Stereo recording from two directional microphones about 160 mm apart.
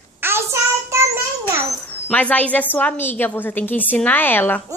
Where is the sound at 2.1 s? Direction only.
10° left (ahead or behind).